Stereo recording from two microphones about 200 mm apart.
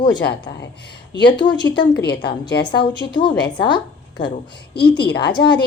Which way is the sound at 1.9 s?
55° left (ahead or behind).